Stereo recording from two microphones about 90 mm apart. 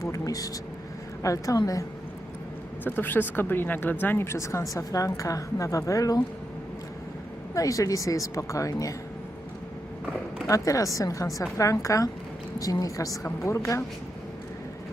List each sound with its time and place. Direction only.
0.0 s speech: 40° left (ahead or behind)
2.8 s speech: 20° left (ahead or behind); by 6.2 s 40° left (ahead or behind)
7.5 s speech: 40° left (ahead or behind)
10.4 s speech: 40° left (ahead or behind)